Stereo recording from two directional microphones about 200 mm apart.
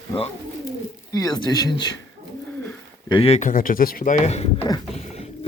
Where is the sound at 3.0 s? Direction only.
25° left (ahead or behind).